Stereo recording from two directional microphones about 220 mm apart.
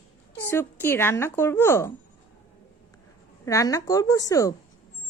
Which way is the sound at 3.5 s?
15° left (ahead or behind).